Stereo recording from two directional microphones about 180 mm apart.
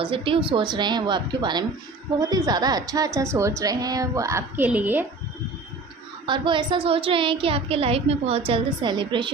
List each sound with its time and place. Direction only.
0.0 s a woman's voice: 30° right (ahead or behind); by 5.0 s 10° right (ahead or behind)
6.2 s a woman's voice: 25° right (ahead or behind)